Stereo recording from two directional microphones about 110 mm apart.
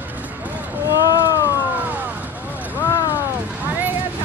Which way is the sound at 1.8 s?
15° right (ahead or behind).